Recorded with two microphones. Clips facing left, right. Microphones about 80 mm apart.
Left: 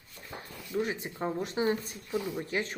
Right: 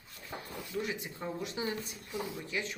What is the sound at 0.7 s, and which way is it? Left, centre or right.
Speech, left.